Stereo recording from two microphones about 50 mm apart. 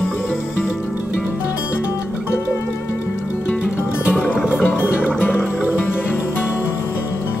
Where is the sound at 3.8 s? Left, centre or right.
Left.